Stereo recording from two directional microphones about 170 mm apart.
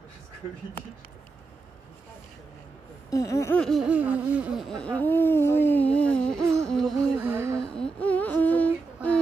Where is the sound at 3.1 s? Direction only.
20° left (ahead or behind).